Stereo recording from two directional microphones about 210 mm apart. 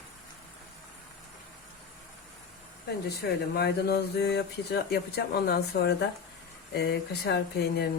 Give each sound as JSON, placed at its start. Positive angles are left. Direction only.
{"t": 3.1, "sound": "speech", "side_deg": 50}